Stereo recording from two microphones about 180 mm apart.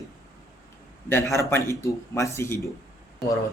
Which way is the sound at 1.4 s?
15° left (ahead or behind).